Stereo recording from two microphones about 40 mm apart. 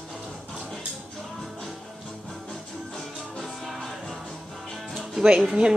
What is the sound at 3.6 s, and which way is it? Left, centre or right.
Music, centre.